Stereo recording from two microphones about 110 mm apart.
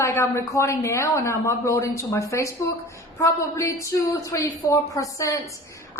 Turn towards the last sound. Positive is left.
turn(degrees=30)  # may be behind; listen again after turning